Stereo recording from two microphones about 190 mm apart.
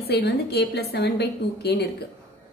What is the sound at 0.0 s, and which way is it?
A woman's voice, 60° left (ahead or behind).